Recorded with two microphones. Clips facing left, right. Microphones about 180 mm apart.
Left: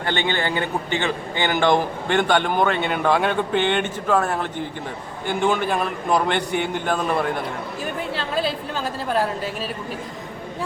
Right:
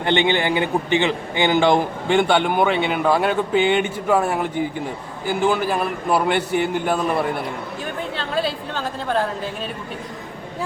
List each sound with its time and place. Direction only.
0.0 s a man's voice: 20° right (ahead or behind); by 9.5 s 5° left (ahead or behind)